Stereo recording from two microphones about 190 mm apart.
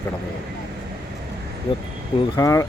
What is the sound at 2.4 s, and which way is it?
Speech, 15° left (ahead or behind).